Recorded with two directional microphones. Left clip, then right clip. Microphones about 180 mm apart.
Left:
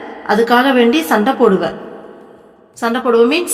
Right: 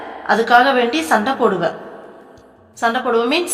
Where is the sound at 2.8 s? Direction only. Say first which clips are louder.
Left 4 dB; 40° left (ahead or behind).